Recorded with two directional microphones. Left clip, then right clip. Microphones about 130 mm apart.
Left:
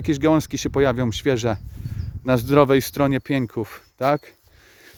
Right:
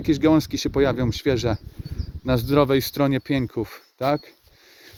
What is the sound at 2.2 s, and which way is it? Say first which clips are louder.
Speech: left 3 dB; 55° left (ahead or behind).